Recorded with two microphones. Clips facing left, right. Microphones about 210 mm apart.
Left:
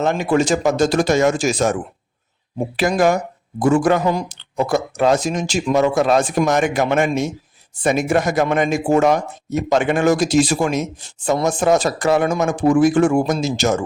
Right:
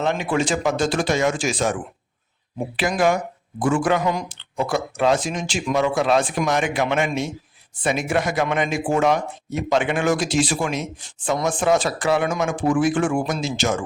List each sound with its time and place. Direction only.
0.0 s speech: 45° left (ahead or behind)